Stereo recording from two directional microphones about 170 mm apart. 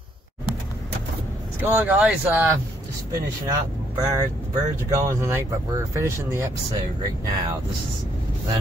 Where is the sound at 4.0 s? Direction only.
20° right (ahead or behind).